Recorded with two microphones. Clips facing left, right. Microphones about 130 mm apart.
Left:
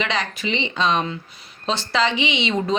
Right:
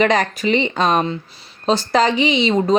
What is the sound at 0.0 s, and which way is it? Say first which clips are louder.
A woman's voice: right 8 dB; 45° right (ahead or behind).